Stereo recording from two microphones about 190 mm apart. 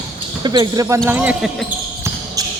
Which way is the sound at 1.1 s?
10° right (ahead or behind).